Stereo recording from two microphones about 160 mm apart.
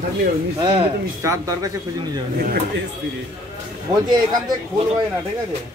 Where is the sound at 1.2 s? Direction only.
20° right (ahead or behind).